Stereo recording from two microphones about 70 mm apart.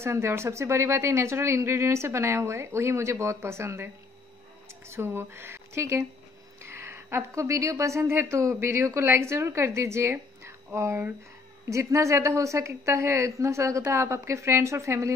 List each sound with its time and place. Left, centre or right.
0.0 s speech: right
10.4 s a sound: right
11.7 s a woman's voice: right